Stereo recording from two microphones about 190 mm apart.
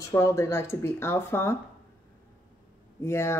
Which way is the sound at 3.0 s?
15° left (ahead or behind).